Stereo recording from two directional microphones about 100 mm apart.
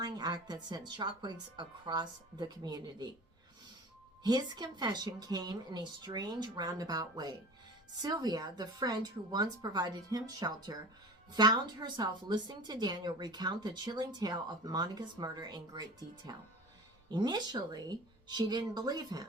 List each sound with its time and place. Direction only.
0.0 s a woman's voice: 45° right (ahead or behind)
4.2 s a woman's voice: 45° right (ahead or behind)